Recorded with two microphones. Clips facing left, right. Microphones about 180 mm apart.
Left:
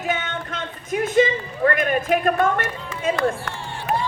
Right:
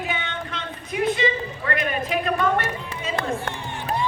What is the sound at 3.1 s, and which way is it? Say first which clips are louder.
Crowd: left 3 dB; 30° right (ahead or behind).